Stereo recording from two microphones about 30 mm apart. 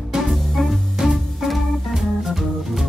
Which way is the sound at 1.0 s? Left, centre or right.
Centre.